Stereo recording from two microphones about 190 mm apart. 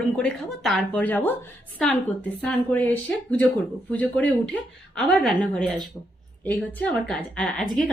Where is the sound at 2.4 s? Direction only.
10° left (ahead or behind).